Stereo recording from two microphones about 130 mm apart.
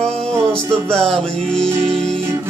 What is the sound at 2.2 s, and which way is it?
Music, 20° right (ahead or behind).